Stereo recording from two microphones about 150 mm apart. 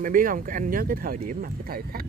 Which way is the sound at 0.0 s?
65° right (ahead or behind).